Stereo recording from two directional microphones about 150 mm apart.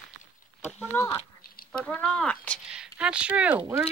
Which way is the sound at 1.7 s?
5° left (ahead or behind).